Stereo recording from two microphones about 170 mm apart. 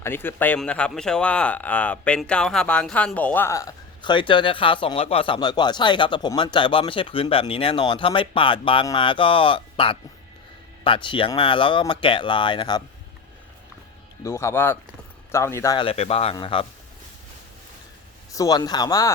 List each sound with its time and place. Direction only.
0.0 s speech: 10° left (ahead or behind)
14.3 s speech: 15° left (ahead or behind)
15.8 s speech: 35° left (ahead or behind)
18.3 s speech: 20° left (ahead or behind)